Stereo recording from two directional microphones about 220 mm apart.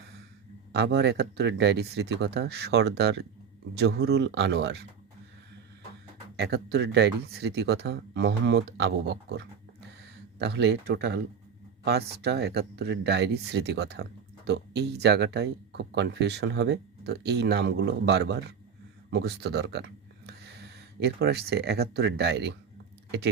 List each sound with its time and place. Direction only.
0.7 s speech: 50° right (ahead or behind)
6.3 s speech: 50° right (ahead or behind)